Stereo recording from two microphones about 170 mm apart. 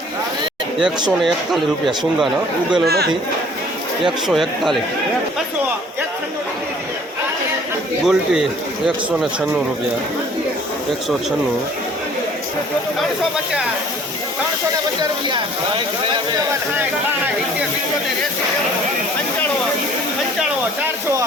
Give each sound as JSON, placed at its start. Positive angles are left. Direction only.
{"t": 1.2, "sound": "a man's voice", "side_deg": 0}
{"t": 2.8, "sound": "speech", "side_deg": -70}
{"t": 4.0, "sound": "a man's voice", "side_deg": 0}
{"t": 8.0, "sound": "a man's voice", "side_deg": -5}